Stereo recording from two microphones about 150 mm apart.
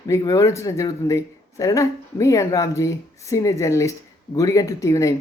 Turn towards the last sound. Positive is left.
turn(degrees=20)  # may be behind; listen again after turning